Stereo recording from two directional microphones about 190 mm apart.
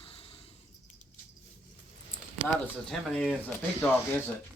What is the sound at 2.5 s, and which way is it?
Speech, 5° left (ahead or behind).